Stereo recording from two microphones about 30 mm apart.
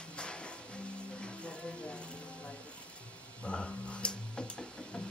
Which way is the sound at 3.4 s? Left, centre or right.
Left.